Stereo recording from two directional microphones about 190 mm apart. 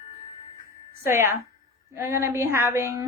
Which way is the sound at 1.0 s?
15° right (ahead or behind).